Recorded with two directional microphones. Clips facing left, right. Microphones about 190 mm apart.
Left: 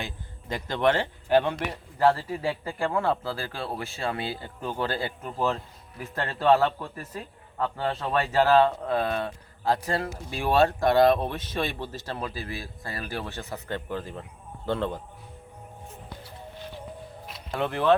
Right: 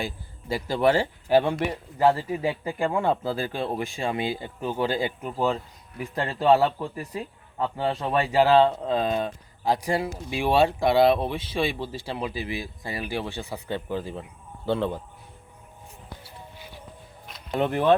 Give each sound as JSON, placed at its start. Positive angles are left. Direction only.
{"t": 0.0, "sound": "speech", "side_deg": -10}
{"t": 17.5, "sound": "speech", "side_deg": -20}